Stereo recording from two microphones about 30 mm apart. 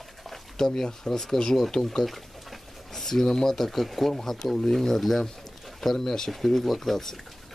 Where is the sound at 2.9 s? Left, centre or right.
Centre.